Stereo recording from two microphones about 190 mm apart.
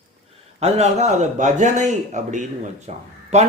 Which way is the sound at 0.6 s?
35° right (ahead or behind).